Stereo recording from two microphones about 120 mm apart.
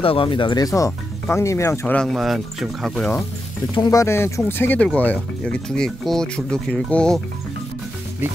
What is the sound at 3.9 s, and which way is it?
Speech, 25° left (ahead or behind).